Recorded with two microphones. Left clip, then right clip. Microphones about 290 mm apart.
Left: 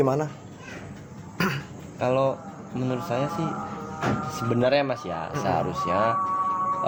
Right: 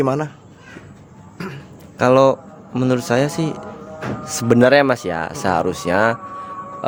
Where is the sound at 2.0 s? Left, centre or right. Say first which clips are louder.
Right 11 dB; right.